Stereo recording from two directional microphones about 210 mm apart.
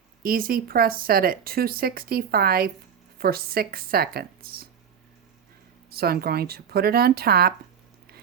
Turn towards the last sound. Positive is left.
turn(degrees=-45)  # may be behind; listen again after turning